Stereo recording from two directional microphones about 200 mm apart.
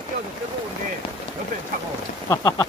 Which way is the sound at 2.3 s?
20° left (ahead or behind).